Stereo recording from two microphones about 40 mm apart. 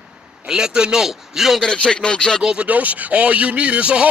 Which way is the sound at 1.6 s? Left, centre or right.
Left.